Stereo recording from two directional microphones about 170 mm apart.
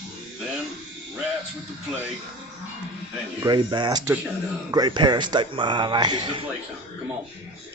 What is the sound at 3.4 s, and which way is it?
A man's voice, 25° right (ahead or behind).